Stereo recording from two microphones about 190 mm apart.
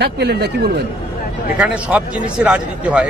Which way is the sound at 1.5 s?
5° right (ahead or behind).